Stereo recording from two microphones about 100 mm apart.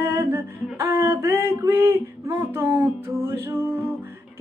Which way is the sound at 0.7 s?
25° right (ahead or behind).